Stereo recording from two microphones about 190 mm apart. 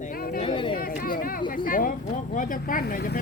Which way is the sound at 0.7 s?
50° left (ahead or behind).